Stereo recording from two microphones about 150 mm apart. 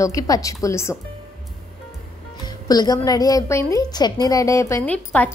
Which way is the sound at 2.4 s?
25° left (ahead or behind).